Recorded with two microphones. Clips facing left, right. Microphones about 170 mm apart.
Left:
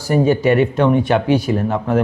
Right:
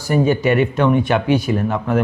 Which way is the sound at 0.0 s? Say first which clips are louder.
Left 2 dB; 35° left (ahead or behind).